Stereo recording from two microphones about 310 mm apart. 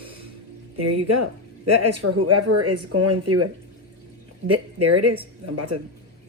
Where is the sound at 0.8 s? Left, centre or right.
Right.